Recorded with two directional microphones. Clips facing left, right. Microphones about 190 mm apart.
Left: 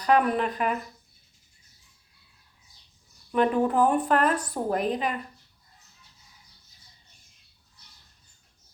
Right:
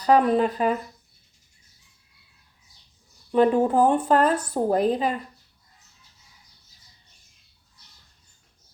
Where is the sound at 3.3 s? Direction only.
30° right (ahead or behind).